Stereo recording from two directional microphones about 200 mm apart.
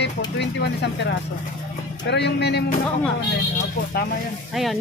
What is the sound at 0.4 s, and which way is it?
Speech, 55° left (ahead or behind).